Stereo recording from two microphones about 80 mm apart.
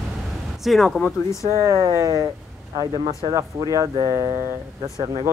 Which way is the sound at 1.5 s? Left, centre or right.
Right.